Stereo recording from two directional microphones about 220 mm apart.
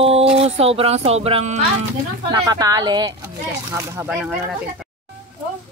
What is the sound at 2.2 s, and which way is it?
A woman's voice, 15° right (ahead or behind).